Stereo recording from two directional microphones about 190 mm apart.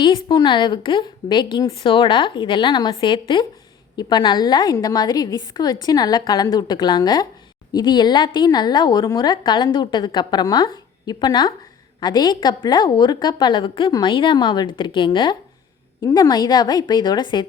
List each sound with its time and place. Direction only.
0.3 s a woman's voice: 25° left (ahead or behind)